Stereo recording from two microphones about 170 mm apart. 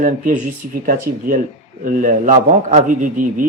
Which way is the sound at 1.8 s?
50° right (ahead or behind).